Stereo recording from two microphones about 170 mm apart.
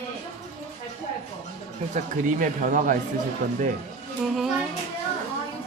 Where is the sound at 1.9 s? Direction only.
55° right (ahead or behind).